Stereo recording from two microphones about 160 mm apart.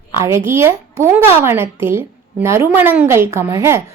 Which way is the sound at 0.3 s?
15° right (ahead or behind).